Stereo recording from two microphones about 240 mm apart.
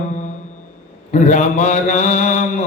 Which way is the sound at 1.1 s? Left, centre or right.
Left.